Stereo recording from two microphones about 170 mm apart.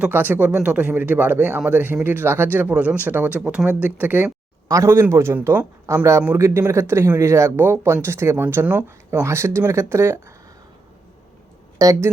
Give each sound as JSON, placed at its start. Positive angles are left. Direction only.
{"t": 0.0, "sound": "speech", "side_deg": -10}
{"t": 11.8, "sound": "speech", "side_deg": -15}